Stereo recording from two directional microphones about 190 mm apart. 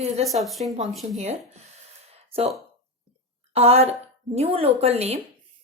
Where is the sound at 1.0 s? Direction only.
35° right (ahead or behind).